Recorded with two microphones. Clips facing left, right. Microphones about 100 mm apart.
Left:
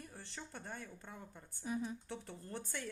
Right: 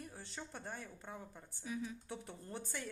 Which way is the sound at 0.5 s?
Centre (ahead or behind).